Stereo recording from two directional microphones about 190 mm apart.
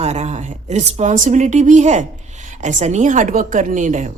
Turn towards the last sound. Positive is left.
turn(degrees=-40)  # may be behind; listen again after turning